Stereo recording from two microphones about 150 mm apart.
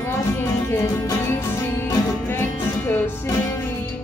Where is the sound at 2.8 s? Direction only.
15° left (ahead or behind).